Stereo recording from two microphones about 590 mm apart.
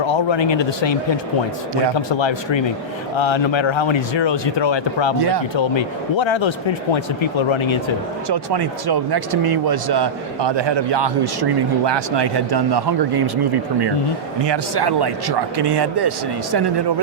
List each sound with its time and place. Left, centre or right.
0.0 s speech: left
8.3 s speech: right